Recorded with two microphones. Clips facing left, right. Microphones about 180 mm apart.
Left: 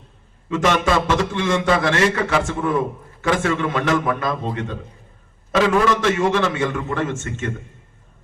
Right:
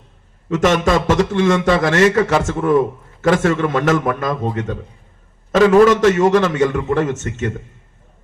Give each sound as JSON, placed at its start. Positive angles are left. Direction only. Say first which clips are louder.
{"t": 0.5, "sound": "a man's voice", "louder": "right 3 dB", "side_deg": -45}